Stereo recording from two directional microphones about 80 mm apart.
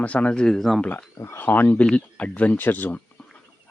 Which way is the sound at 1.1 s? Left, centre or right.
Left.